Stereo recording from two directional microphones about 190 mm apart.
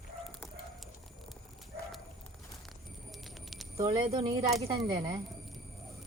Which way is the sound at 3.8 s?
25° right (ahead or behind).